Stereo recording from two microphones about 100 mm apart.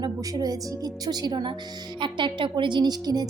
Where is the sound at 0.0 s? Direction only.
40° right (ahead or behind).